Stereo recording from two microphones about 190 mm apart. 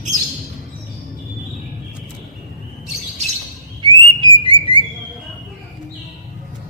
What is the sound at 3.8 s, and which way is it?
Bird, 25° right (ahead or behind).